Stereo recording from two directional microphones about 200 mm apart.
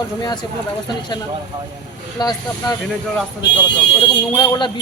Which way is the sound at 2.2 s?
20° left (ahead or behind).